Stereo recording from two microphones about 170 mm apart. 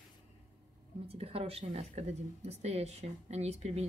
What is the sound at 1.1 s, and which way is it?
Speech, 35° right (ahead or behind).